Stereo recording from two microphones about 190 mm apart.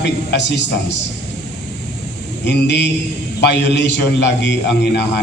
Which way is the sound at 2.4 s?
65° left (ahead or behind).